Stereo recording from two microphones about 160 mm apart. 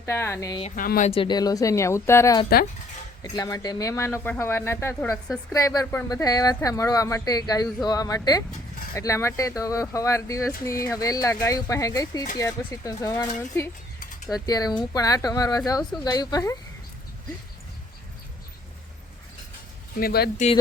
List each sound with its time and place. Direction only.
0.0 s speech: 15° left (ahead or behind)
0.8 s speech: 55° left (ahead or behind)
1.1 s speech: 30° left (ahead or behind)
20.0 s speech: 75° left (ahead or behind)